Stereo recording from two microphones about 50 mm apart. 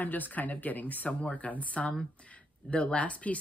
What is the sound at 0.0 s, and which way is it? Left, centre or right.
Speech, left.